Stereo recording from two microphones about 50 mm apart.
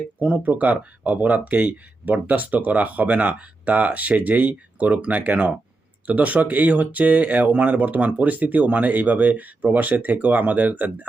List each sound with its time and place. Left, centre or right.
0.2 s speech: right